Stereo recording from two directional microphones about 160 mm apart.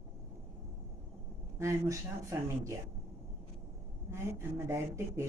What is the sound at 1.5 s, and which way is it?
Speech, 20° right (ahead or behind).